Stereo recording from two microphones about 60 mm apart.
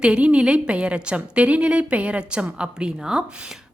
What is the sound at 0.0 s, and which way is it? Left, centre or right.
A woman's voice, centre.